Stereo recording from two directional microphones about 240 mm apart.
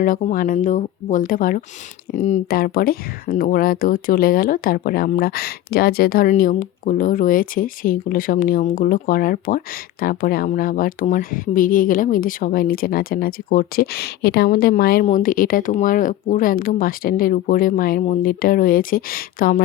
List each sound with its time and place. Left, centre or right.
0.0 s speech: left